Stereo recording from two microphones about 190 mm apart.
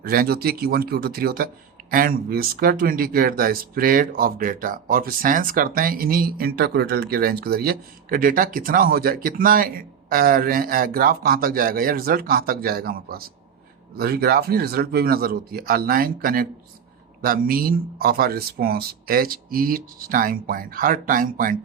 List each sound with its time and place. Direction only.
0.0 s speech: 55° right (ahead or behind)